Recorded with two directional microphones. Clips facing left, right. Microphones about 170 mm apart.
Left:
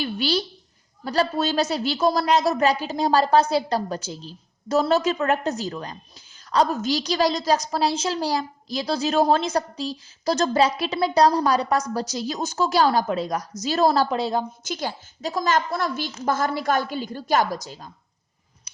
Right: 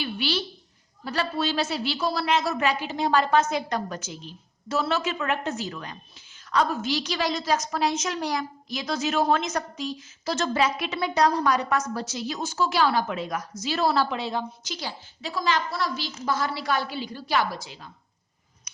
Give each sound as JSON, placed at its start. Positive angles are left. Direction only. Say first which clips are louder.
{"t": 0.0, "sound": "a woman's voice", "louder": "left 4 dB", "side_deg": 40}